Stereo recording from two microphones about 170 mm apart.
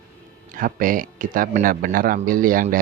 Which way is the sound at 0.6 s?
55° right (ahead or behind).